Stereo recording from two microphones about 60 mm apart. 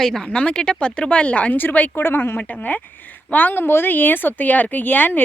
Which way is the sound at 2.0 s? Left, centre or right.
Left.